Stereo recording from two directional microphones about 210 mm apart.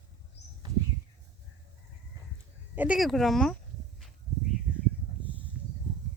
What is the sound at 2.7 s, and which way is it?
Speech, 5° right (ahead or behind).